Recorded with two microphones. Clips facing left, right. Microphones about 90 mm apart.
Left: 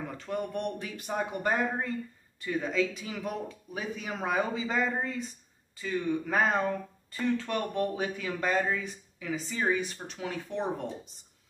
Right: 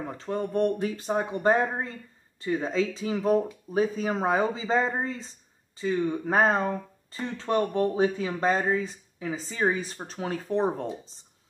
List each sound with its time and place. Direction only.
0.2 s speech: 30° right (ahead or behind)